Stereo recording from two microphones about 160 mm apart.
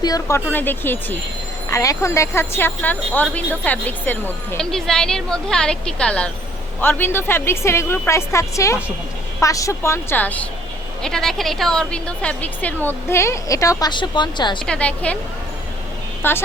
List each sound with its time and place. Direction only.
0.0 s speech: 20° left (ahead or behind)
14.7 s speech: 10° left (ahead or behind)
16.2 s speech: 15° left (ahead or behind)